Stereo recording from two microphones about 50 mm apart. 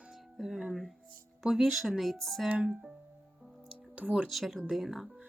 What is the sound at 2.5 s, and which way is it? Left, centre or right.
Speech, right.